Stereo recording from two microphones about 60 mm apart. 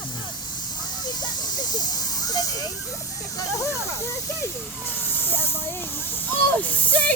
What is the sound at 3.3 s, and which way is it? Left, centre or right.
Speech, left.